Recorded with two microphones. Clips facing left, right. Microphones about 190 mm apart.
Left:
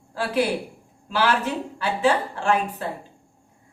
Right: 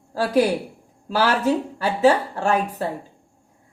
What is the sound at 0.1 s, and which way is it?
Speech, 40° right (ahead or behind).